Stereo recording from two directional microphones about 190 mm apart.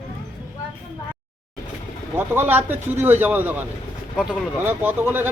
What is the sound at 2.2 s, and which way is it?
Speech, 10° right (ahead or behind).